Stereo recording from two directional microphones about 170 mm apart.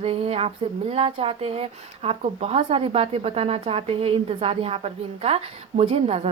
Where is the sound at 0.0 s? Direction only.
35° right (ahead or behind).